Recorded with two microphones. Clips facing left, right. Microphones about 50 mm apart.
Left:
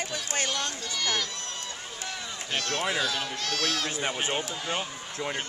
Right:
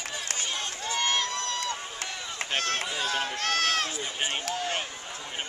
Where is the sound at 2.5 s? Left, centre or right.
Right.